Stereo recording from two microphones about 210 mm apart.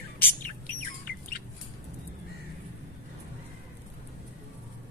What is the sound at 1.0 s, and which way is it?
Bird, 45° left (ahead or behind).